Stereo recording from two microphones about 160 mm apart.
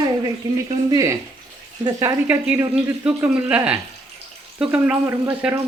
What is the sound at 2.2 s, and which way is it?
Speech, 10° right (ahead or behind).